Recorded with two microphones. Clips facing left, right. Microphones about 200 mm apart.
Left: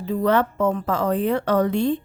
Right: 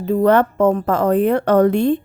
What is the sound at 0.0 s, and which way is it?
A woman's voice, 55° right (ahead or behind).